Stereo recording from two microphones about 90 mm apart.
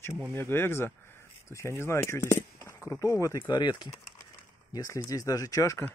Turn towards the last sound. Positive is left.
turn(degrees=35)  # may be behind; listen again after turning